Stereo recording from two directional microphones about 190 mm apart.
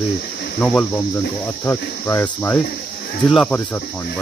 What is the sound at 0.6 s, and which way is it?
Cricket, 10° left (ahead or behind).